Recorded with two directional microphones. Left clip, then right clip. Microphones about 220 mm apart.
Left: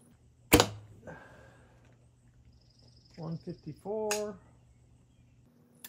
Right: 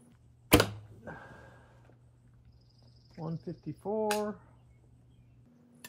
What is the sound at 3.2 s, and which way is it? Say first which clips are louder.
Cricket: right 2 dB; 25° right (ahead or behind).